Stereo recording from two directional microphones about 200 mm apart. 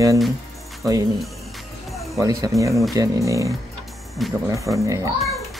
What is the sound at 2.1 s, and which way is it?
Speech, 15° right (ahead or behind).